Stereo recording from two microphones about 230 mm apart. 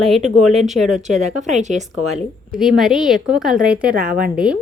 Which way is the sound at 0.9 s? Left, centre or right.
Right.